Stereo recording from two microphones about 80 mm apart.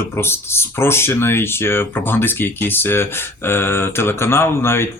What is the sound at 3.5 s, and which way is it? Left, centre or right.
Mantra, left.